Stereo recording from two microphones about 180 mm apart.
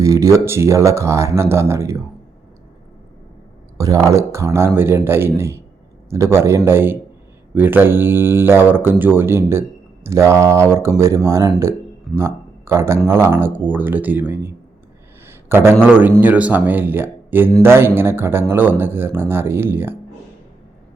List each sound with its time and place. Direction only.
0.0 s speech: 15° right (ahead or behind)
3.8 s a man's voice: 20° right (ahead or behind)